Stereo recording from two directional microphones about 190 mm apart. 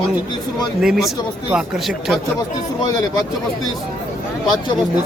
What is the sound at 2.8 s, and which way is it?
Speech, 20° left (ahead or behind).